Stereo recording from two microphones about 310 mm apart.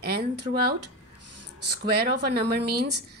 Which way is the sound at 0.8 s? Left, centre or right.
Right.